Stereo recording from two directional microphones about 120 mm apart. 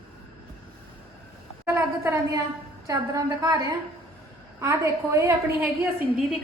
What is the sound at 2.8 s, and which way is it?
A woman's voice, 30° right (ahead or behind).